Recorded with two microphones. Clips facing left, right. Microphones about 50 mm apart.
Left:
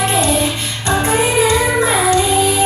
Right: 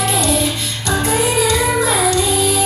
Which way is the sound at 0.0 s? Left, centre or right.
Left.